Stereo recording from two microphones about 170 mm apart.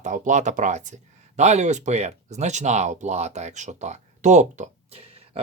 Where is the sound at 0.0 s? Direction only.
45° right (ahead or behind).